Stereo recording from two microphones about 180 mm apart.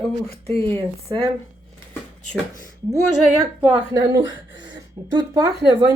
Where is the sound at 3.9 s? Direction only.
20° right (ahead or behind).